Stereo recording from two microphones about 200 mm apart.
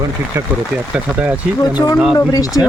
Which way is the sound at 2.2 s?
15° left (ahead or behind).